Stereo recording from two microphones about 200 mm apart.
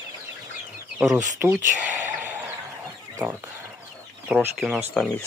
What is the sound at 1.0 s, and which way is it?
Speech, 15° right (ahead or behind).